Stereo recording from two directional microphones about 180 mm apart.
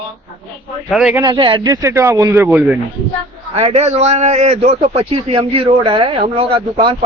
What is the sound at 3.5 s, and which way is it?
A man's voice, 35° right (ahead or behind).